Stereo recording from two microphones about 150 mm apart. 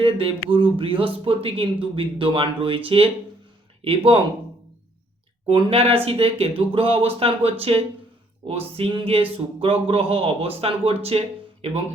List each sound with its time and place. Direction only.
0.0 s a sound: 40° right (ahead or behind)
0.5 s speech: 35° right (ahead or behind)
5.5 s speech: 40° right (ahead or behind)